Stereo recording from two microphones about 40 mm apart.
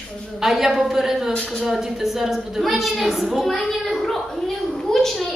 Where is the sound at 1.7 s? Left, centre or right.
Centre.